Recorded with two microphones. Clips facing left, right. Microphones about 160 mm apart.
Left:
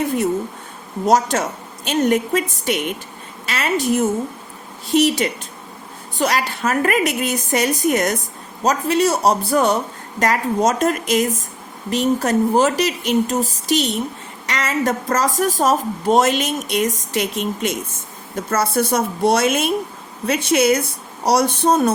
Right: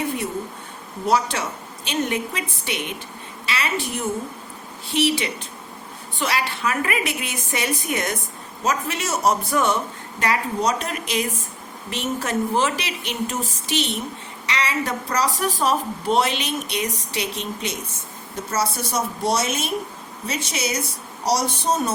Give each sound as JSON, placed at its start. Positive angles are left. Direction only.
{"t": 1.0, "sound": "speech", "side_deg": 45}